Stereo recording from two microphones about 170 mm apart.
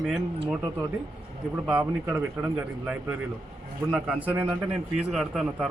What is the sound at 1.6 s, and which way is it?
A man's voice, 5° right (ahead or behind).